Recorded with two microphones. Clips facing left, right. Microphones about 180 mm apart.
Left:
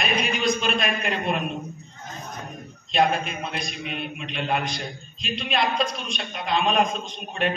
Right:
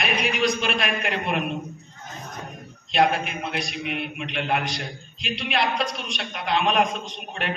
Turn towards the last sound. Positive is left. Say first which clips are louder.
# left 4 dB
turn(degrees=-75)  # may be behind; listen again after turning